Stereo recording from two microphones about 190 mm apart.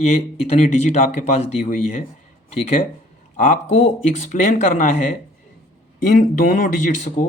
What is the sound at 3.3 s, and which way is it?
Speech, 40° left (ahead or behind).